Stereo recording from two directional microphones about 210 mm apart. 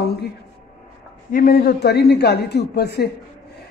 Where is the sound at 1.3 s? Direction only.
45° left (ahead or behind).